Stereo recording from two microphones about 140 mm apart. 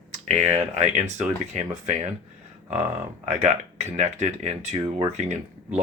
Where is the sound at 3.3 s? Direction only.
55° right (ahead or behind).